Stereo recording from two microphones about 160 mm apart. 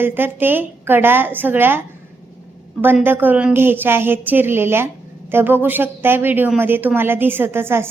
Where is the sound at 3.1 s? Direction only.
10° right (ahead or behind).